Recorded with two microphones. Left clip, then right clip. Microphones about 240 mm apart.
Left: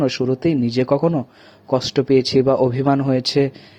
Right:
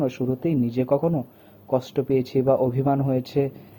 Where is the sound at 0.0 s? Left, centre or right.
Left.